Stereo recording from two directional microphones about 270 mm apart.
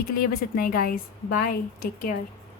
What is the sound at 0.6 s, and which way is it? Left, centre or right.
Speech, left.